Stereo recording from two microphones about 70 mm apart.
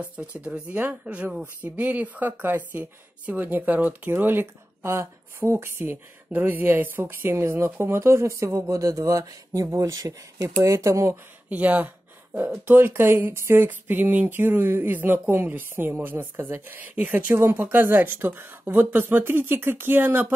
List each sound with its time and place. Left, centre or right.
0.0 s speech: centre; by 11.1 s right
11.4 s speech: right
12.4 s speech: right